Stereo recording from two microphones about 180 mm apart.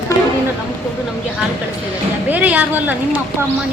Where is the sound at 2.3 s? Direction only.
10° right (ahead or behind).